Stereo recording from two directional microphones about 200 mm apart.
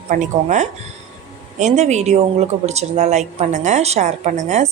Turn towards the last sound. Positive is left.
turn(degrees=-35)  # may be behind; listen again after turning